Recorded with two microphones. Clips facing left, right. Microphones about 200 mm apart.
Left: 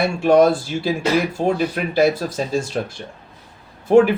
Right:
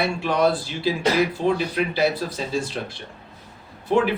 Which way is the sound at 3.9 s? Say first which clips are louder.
Left 7 dB; 50° left (ahead or behind).